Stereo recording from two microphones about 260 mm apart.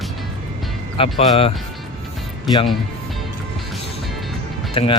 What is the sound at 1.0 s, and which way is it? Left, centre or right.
Speech, left.